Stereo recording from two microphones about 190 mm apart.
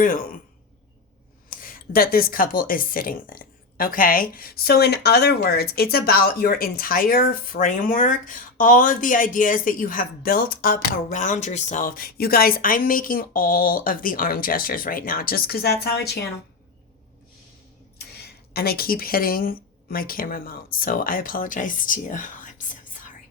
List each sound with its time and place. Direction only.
0.0 s speech: 45° left (ahead or behind)
1.5 s speech: 50° left (ahead or behind)
17.9 s speech: 55° left (ahead or behind)